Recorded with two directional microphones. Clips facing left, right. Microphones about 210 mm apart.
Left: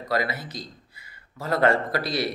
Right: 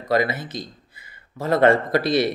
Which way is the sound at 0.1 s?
20° right (ahead or behind).